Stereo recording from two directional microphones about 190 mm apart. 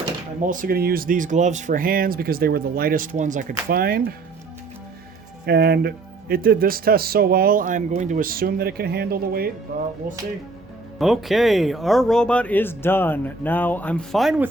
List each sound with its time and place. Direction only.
0.4 s speech: 45° right (ahead or behind)
5.5 s speech: 55° right (ahead or behind)
10.9 s speech: centre (ahead or behind)